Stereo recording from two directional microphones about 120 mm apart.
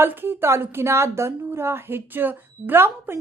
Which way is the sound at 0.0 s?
20° right (ahead or behind).